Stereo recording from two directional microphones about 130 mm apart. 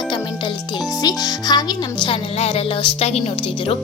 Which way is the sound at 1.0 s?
30° left (ahead or behind).